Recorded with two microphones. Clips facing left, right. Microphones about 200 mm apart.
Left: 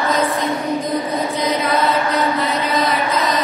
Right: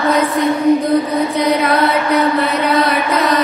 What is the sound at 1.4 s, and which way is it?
Female singing, 65° right (ahead or behind).